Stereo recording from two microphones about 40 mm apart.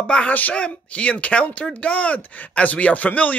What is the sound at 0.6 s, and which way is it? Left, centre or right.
Speech, left.